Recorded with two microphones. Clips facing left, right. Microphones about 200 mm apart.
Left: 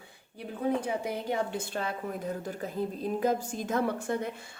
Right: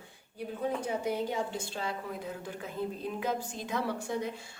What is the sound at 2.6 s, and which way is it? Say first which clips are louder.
A woman's voice: left 3 dB; 40° left (ahead or behind).